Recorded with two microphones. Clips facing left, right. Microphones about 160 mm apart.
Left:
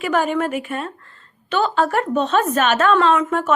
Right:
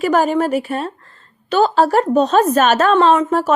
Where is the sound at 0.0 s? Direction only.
40° right (ahead or behind).